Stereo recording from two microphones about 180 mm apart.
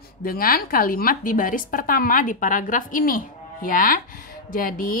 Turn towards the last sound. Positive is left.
turn(degrees=50)  # may be behind; listen again after turning